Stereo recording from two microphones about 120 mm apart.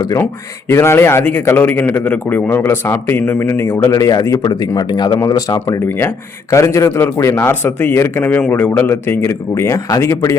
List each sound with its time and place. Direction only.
0.7 s a man's voice: 20° left (ahead or behind)
3.9 s a man's voice: 30° left (ahead or behind)